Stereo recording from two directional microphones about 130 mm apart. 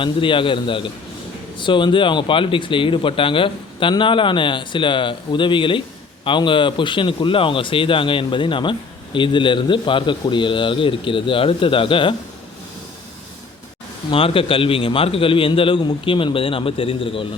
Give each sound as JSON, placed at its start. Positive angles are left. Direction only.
{"t": 0.0, "sound": "speech", "side_deg": 40}
{"t": 14.1, "sound": "a man's voice", "side_deg": 45}